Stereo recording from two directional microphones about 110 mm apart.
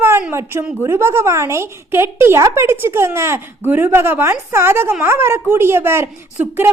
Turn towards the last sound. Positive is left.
turn(degrees=-20)  # may be behind; listen again after turning